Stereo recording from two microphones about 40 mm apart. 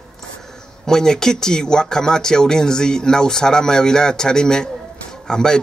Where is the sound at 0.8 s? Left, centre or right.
Centre.